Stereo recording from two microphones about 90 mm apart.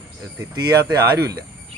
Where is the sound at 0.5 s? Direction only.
40° right (ahead or behind).